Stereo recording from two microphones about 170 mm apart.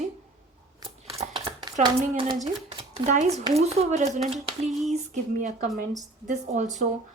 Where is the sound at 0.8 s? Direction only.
35° right (ahead or behind).